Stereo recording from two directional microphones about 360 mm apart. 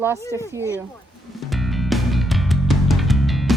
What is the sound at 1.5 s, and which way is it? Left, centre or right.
Music, centre.